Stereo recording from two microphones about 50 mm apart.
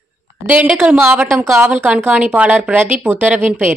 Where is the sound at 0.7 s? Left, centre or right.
Centre.